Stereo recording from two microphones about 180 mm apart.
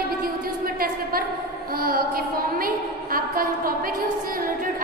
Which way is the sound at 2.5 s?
55° right (ahead or behind).